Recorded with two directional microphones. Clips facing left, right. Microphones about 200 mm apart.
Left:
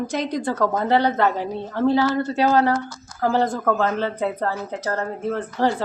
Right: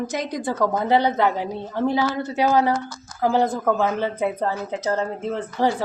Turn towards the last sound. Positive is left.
turn(degrees=-15)  # may be behind; listen again after turning